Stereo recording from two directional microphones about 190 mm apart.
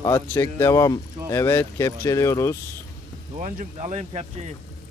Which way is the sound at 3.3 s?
40° right (ahead or behind).